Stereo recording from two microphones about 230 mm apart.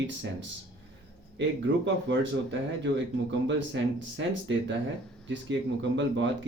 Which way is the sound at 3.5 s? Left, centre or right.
Right.